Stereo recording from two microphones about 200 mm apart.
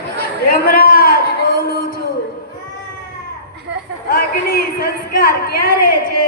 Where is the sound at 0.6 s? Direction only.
45° left (ahead or behind).